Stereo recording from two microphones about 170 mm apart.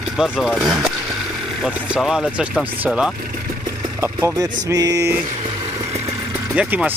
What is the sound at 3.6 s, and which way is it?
Vehicle, 15° right (ahead or behind).